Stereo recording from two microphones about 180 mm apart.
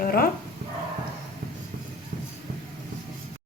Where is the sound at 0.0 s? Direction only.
55° left (ahead or behind).